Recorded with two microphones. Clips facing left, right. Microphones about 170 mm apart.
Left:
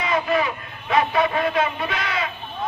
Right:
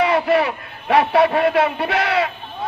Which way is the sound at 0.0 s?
70° right (ahead or behind).